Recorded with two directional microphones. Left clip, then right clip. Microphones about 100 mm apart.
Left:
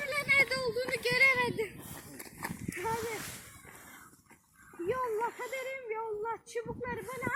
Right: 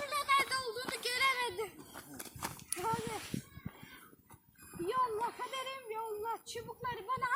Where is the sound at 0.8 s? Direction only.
40° right (ahead or behind).